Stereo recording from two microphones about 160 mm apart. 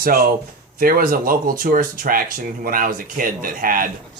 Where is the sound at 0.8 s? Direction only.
60° right (ahead or behind).